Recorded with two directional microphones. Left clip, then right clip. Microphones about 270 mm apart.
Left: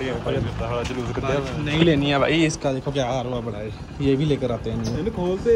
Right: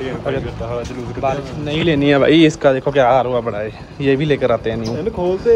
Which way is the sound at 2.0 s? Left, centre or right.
Right.